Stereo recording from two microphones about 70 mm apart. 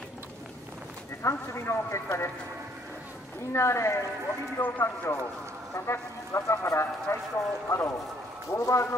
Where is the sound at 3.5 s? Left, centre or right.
Left.